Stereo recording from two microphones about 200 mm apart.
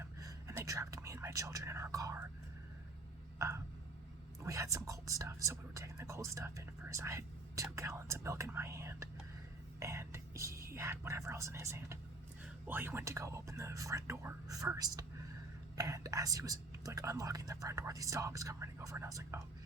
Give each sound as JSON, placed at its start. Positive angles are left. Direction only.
{"t": 0.0, "sound": "whispering", "side_deg": -15}
{"t": 3.3, "sound": "a sound", "side_deg": -15}
{"t": 4.4, "sound": "speech", "side_deg": -15}